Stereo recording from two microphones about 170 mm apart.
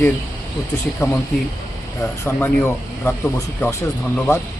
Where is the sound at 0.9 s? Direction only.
10° left (ahead or behind).